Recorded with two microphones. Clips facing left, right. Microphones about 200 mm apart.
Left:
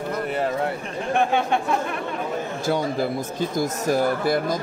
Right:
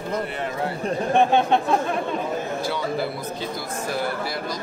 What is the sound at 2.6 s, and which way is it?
Speech, 45° left (ahead or behind).